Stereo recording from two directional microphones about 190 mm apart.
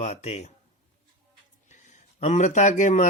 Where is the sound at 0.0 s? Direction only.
35° left (ahead or behind).